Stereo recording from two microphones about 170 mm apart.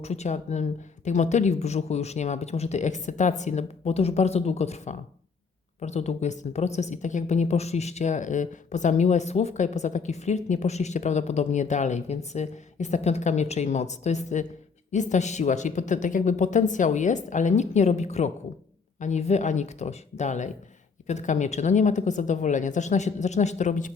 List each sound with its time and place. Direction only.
0.0 s a woman's voice: 40° left (ahead or behind)